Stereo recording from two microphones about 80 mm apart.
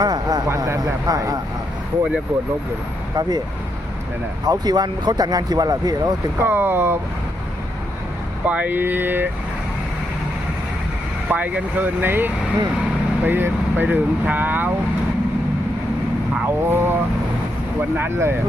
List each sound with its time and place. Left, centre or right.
0.0 s a sound: right
0.4 s speech: right
1.0 s speech: right
3.2 s speech: right
4.4 s speech: right
6.4 s speech: right
8.4 s speech: centre
11.3 s speech: centre
16.6 s speech: right